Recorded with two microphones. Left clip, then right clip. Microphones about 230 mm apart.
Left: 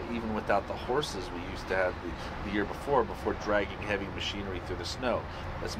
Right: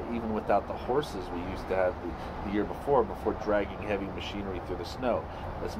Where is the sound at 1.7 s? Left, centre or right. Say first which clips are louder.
Right 1 dB; right.